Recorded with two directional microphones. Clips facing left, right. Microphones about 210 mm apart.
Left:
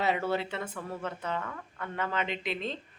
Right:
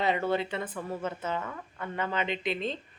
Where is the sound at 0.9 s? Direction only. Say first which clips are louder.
Right 2 dB; 5° right (ahead or behind).